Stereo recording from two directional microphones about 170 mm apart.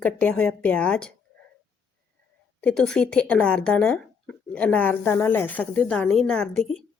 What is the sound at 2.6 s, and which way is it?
Speech, 5° left (ahead or behind).